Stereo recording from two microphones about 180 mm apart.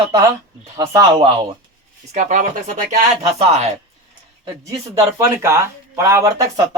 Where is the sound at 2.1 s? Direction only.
40° right (ahead or behind).